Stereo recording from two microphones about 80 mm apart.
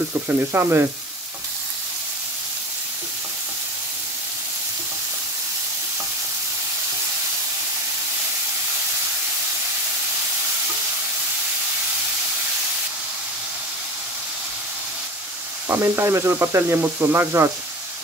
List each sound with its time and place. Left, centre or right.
0.3 s sizzle: right
15.7 s sizzle: right